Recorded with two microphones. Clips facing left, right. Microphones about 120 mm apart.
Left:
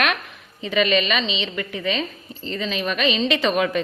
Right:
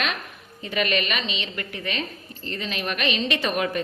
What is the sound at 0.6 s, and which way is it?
Speech, 90° left.